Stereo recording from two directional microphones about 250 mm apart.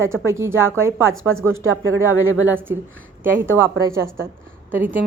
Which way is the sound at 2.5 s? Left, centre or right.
Centre.